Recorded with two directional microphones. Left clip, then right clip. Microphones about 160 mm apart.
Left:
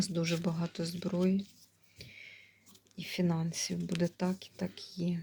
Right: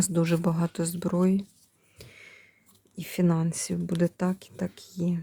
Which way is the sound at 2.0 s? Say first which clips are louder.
Right 2 dB; 50° right (ahead or behind).